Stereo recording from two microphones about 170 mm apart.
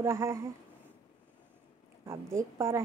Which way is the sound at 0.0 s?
15° right (ahead or behind).